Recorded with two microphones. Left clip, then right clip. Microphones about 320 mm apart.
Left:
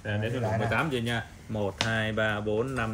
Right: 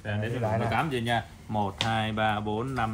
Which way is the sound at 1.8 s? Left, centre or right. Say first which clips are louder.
Even; right.